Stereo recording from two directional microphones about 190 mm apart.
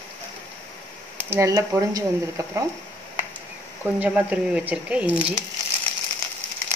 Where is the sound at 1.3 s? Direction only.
15° right (ahead or behind).